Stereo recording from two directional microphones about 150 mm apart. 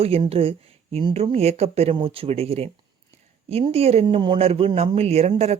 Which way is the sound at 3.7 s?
40° right (ahead or behind).